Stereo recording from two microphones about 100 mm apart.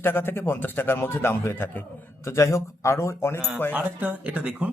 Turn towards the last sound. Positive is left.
turn(degrees=-10)  # may be behind; listen again after turning